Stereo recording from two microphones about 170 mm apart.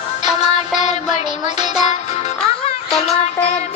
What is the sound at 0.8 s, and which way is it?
Music, 45° left (ahead or behind).